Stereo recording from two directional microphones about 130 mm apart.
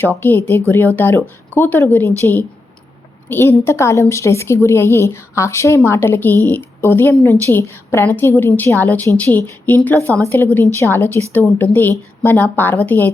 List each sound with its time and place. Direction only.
0.0 s a woman's voice: 15° left (ahead or behind)